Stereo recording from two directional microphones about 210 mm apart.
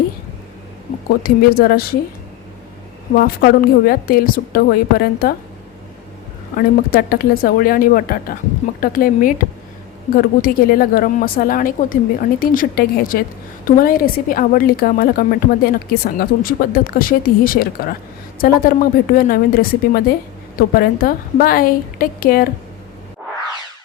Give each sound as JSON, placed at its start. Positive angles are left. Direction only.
{"t": 1.2, "sound": "a woman's voice", "side_deg": 45}
{"t": 3.4, "sound": "a woman's voice", "side_deg": 45}
{"t": 6.6, "sound": "a woman's voice", "side_deg": 45}